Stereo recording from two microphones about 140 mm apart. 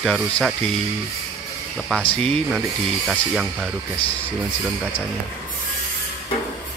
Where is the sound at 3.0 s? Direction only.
5° right (ahead or behind).